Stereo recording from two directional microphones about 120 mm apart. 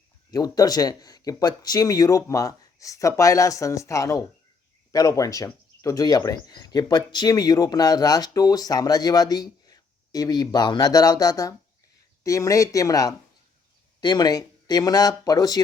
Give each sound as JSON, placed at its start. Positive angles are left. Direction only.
{"t": 0.3, "sound": "speech", "side_deg": 30}